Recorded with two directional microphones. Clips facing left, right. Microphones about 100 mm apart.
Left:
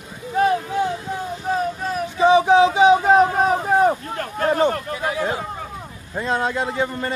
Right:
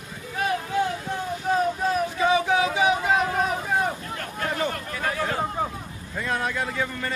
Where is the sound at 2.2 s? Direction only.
25° left (ahead or behind).